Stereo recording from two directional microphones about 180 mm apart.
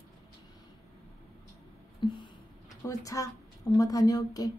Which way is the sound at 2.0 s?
25° left (ahead or behind).